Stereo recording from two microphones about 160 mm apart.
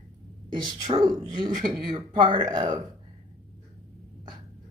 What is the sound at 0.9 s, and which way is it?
A woman's voice, 25° right (ahead or behind).